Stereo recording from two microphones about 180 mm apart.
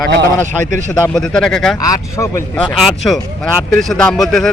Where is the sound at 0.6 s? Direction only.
45° right (ahead or behind).